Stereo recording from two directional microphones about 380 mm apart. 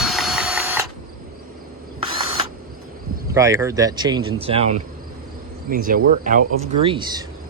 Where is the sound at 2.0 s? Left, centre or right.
Centre.